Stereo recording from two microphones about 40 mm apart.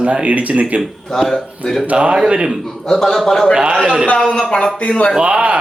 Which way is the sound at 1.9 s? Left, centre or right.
Right.